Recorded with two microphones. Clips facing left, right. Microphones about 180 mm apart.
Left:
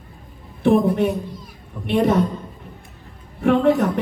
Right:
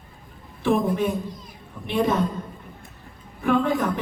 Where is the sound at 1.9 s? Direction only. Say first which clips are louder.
Left 5 dB; 70° left (ahead or behind).